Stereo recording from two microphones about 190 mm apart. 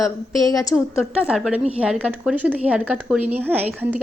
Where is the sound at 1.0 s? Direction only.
5° right (ahead or behind).